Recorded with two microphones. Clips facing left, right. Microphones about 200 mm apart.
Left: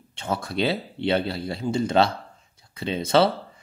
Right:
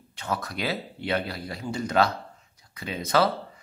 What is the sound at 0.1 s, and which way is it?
Speech, 25° left (ahead or behind).